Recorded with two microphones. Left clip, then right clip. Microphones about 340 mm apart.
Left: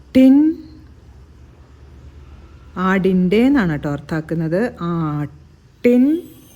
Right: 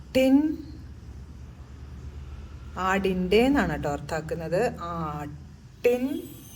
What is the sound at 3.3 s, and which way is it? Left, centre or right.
Speech, left.